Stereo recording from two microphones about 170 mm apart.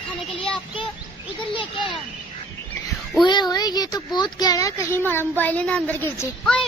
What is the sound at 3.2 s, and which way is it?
Speech, 25° left (ahead or behind).